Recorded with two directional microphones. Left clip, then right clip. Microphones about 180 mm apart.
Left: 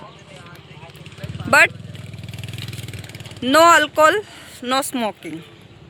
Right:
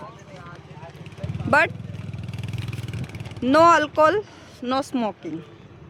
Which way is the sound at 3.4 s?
5° right (ahead or behind).